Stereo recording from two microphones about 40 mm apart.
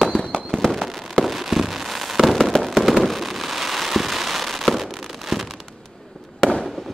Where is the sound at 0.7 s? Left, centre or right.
Centre.